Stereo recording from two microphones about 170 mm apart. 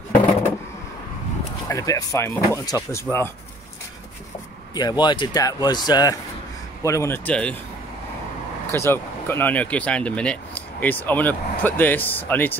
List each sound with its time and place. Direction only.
1.7 s speech: 20° left (ahead or behind)
4.7 s speech: 25° left (ahead or behind); by 7.5 s 5° left (ahead or behind)
8.7 s speech: 15° left (ahead or behind)